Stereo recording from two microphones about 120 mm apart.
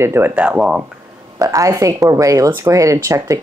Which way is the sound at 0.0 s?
20° right (ahead or behind).